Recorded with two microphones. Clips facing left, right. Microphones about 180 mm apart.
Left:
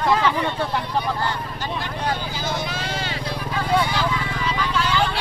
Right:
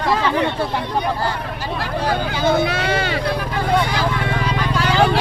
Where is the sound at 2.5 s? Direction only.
65° right (ahead or behind).